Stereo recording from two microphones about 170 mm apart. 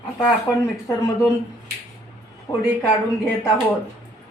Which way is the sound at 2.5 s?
30° left (ahead or behind).